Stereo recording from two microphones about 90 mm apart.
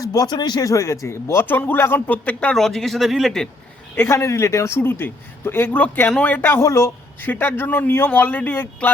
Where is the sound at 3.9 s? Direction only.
25° left (ahead or behind).